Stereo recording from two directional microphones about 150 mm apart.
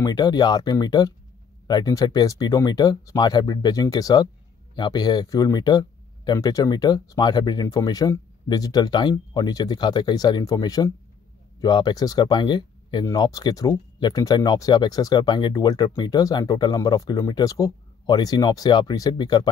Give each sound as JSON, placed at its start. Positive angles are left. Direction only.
{"t": 0.0, "sound": "speech", "side_deg": 25}